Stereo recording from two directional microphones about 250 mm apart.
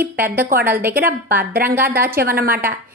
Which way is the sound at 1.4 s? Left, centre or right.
Right.